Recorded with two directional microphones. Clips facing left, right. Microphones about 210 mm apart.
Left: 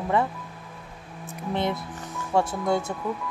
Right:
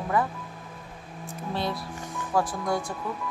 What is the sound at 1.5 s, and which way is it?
Speech, 20° left (ahead or behind).